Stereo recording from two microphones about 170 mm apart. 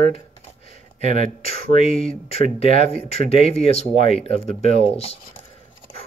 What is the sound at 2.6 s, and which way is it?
Speech, 35° left (ahead or behind).